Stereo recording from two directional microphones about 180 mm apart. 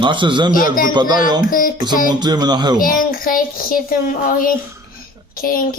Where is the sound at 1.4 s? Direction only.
50° left (ahead or behind).